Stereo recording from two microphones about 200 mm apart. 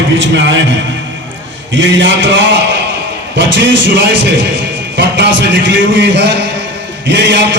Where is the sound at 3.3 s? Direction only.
65° right (ahead or behind).